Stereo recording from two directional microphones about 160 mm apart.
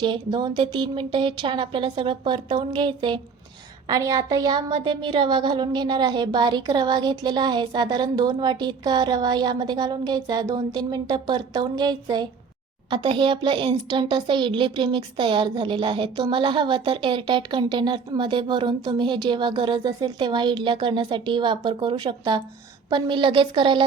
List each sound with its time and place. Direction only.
0.0 s a woman's voice: 30° right (ahead or behind)